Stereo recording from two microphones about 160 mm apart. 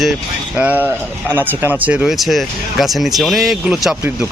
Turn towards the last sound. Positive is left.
turn(degrees=-5)  # may be behind; listen again after turning